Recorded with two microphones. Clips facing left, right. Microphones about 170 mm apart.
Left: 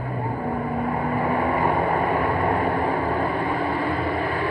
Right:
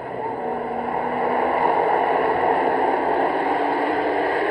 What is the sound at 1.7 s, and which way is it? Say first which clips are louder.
Vehicle: right 3 dB; 35° right (ahead or behind).